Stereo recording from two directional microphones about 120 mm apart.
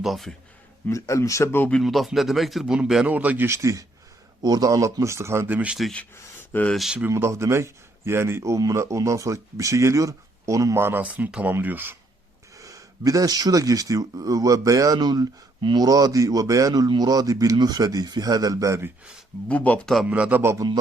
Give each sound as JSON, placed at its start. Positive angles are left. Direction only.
{"t": 0.0, "sound": "speech", "side_deg": 0}
{"t": 0.9, "sound": "speech", "side_deg": 25}
{"t": 1.7, "sound": "speech", "side_deg": 0}
{"t": 6.5, "sound": "speech", "side_deg": 15}
{"t": 6.7, "sound": "speech", "side_deg": -5}
{"t": 7.1, "sound": "speech", "side_deg": -25}
{"t": 12.5, "sound": "speech", "side_deg": -30}
{"t": 19.5, "sound": "speech", "side_deg": 10}
{"t": 20.1, "sound": "speech", "side_deg": -10}